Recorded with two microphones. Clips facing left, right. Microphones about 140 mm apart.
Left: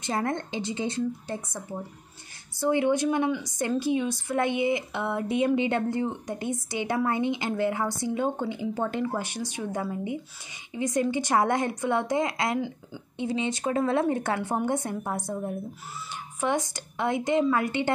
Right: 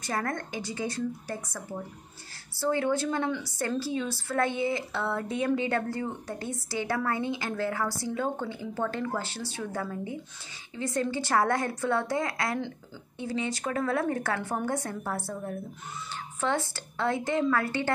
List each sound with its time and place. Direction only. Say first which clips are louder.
0.0 s a woman's voice: left 3 dB; 25° left (ahead or behind)